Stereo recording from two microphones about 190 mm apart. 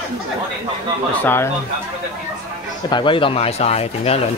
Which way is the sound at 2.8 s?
25° left (ahead or behind).